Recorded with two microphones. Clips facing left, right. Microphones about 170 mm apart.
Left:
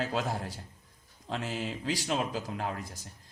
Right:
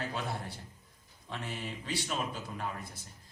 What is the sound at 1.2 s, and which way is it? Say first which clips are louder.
A man's voice: left 6 dB; 90° left.